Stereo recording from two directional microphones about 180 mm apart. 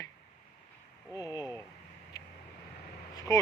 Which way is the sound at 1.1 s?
20° left (ahead or behind).